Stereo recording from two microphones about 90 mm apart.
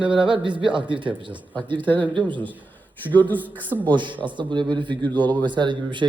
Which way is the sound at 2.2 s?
60° right (ahead or behind).